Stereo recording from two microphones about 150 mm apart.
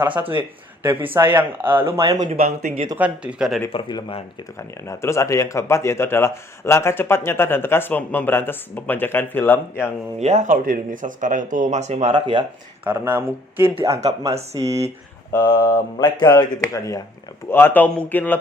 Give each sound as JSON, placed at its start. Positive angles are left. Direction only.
{"t": 0.0, "sound": "speech", "side_deg": -10}
{"t": 1.8, "sound": "speech", "side_deg": -35}
{"t": 2.1, "sound": "speech", "side_deg": -55}
{"t": 2.4, "sound": "speech", "side_deg": -80}
{"t": 3.0, "sound": "speech", "side_deg": -5}
{"t": 3.7, "sound": "speech", "side_deg": 35}
{"t": 4.9, "sound": "speech", "side_deg": 20}
{"t": 10.2, "sound": "speech", "side_deg": -50}
{"t": 12.1, "sound": "speech", "side_deg": -30}
{"t": 12.8, "sound": "speech", "side_deg": -15}
{"t": 15.4, "sound": "speech", "side_deg": 30}